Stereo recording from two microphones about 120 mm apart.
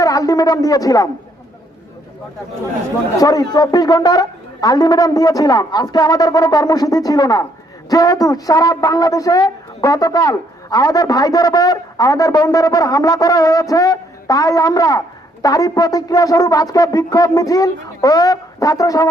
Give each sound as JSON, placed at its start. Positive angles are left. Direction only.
{"t": 0.0, "sound": "speech", "side_deg": 30}
{"t": 3.2, "sound": "speech", "side_deg": 30}